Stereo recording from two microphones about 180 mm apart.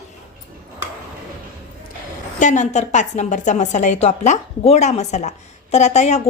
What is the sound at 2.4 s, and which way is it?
A woman's voice, 40° left (ahead or behind).